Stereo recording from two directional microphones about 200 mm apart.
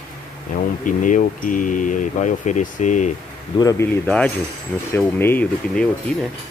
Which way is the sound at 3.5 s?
15° left (ahead or behind).